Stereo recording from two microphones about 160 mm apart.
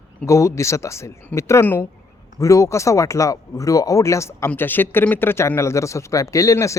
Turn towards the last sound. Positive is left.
turn(degrees=20)  # may be behind; listen again after turning